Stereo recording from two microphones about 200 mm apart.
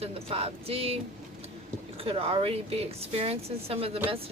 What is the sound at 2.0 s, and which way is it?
Speech, 30° right (ahead or behind).